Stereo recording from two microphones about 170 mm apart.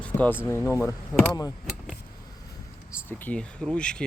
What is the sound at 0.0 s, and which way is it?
Speech, 10° left (ahead or behind).